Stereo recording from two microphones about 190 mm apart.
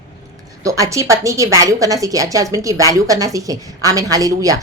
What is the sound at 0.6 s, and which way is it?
A woman's voice, 15° right (ahead or behind).